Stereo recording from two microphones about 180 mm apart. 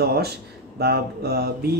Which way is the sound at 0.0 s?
60° right (ahead or behind).